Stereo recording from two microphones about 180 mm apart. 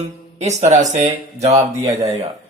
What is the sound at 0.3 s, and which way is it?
Speech, 40° right (ahead or behind).